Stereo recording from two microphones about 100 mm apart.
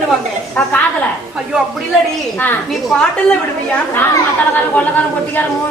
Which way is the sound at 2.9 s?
10° left (ahead or behind).